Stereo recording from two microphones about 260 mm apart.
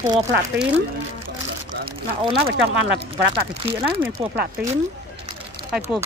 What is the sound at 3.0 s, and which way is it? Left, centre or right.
Speech, right.